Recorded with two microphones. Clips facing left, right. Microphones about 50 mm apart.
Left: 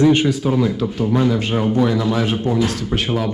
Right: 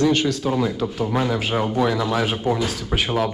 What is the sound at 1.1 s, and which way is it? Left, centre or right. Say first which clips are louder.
A man's voice: left 6 dB; centre.